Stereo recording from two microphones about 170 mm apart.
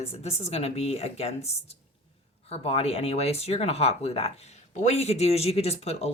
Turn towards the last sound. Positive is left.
turn(degrees=40)  # may be behind; listen again after turning